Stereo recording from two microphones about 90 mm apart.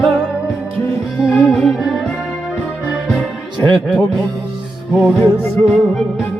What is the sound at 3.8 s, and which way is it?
Music, centre (ahead or behind).